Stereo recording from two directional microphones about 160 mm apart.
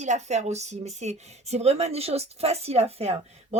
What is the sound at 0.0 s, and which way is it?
A woman's voice, 45° right (ahead or behind).